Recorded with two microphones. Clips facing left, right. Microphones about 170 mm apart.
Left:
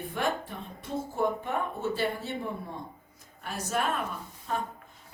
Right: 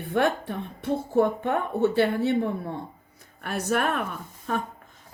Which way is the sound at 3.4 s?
65° right (ahead or behind).